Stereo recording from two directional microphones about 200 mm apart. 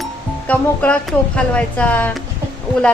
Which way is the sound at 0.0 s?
5° left (ahead or behind).